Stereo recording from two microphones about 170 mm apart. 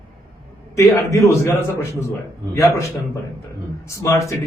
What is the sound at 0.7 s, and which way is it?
A man's voice, 20° left (ahead or behind).